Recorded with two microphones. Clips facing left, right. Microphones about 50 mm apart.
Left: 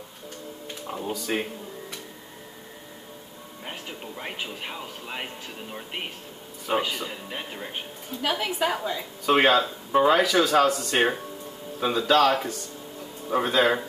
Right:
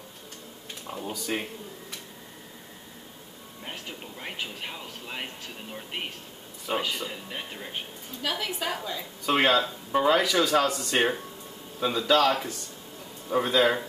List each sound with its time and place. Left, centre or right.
0.8 s speech: centre
3.6 s speech: centre
8.2 s a woman's voice: left
9.2 s speech: centre